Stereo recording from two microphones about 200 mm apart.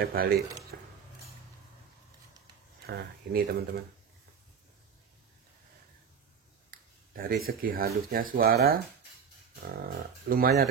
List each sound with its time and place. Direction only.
0.0 s speech: 50° right (ahead or behind)
0.7 s a sound: 55° right (ahead or behind)
2.9 s speech: 50° right (ahead or behind)
6.7 s finger snapping: 45° right (ahead or behind)
7.4 s speech: 45° right (ahead or behind)